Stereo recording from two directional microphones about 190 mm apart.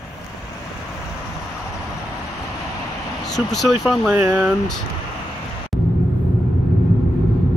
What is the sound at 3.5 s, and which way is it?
Speech, centre (ahead or behind).